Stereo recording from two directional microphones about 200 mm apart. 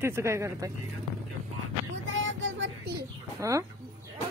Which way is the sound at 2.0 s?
70° right (ahead or behind).